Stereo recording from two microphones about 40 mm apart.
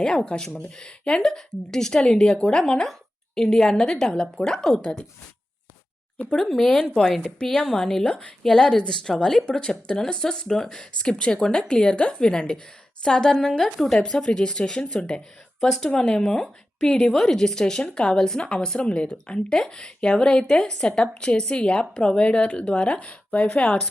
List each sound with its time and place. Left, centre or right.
0.0 s a woman's voice: left
6.4 s a woman's voice: centre
8.0 s a woman's voice: left
8.4 s a woman's voice: centre